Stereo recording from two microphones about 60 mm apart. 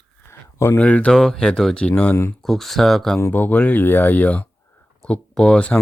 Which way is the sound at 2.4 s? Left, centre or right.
Centre.